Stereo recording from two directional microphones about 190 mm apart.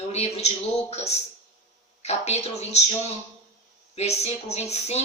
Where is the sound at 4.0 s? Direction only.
35° left (ahead or behind).